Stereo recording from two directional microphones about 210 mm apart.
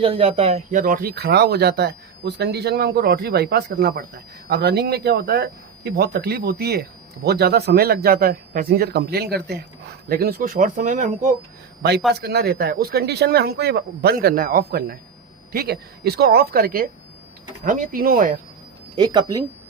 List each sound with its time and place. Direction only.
0.0 s speech: 25° right (ahead or behind)
11.8 s speech: 50° right (ahead or behind)
18.9 s speech: 20° right (ahead or behind)